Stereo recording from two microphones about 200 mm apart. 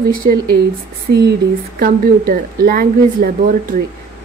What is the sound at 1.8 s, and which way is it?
A woman's voice, 45° right (ahead or behind).